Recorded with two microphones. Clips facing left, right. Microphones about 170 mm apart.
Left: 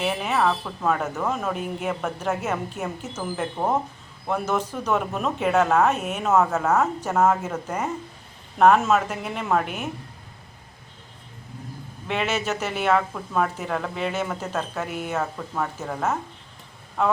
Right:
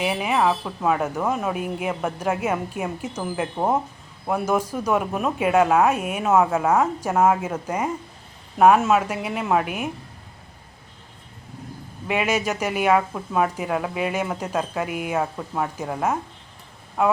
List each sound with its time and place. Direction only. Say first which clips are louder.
0.0 s speech: right 2 dB; 10° right (ahead or behind)
12.0 s speech: right 3 dB; 10° right (ahead or behind)